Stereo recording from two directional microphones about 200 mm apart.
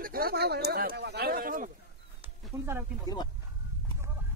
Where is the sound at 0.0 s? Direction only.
50° right (ahead or behind).